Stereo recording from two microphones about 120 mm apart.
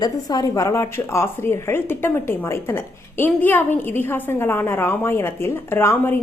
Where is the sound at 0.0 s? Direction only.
35° left (ahead or behind).